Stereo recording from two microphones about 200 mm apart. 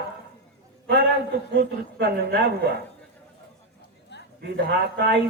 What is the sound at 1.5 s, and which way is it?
A man's voice, 55° right (ahead or behind).